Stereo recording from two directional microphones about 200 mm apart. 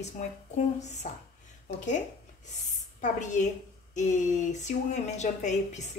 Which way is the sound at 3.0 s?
35° left (ahead or behind).